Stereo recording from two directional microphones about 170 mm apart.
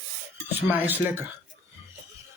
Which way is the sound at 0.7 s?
10° right (ahead or behind).